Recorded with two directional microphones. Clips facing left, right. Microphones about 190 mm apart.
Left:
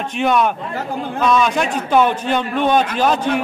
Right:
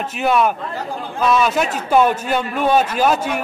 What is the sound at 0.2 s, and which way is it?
A man's voice, 5° right (ahead or behind).